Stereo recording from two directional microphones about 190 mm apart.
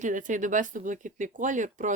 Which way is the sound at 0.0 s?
40° right (ahead or behind).